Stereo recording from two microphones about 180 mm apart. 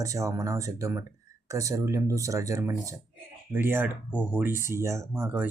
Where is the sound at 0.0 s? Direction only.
15° right (ahead or behind).